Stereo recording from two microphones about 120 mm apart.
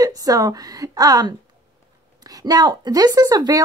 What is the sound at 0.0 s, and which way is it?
Speech, 30° right (ahead or behind).